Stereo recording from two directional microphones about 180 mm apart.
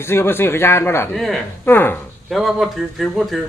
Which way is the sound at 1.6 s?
10° left (ahead or behind).